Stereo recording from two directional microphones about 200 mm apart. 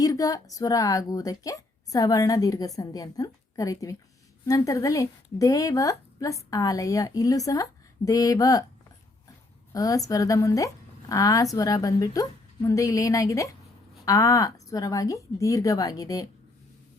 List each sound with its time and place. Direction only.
0.0 s a woman's voice: 20° left (ahead or behind)
9.7 s a woman's voice: 15° left (ahead or behind)